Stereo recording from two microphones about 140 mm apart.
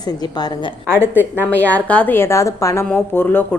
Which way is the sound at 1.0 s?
15° left (ahead or behind).